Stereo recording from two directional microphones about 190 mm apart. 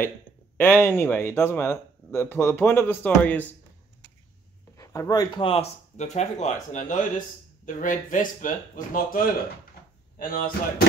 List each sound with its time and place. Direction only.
0.6 s speech: 10° left (ahead or behind)
4.7 s speech: 15° left (ahead or behind); by 10.9 s 50° left (ahead or behind)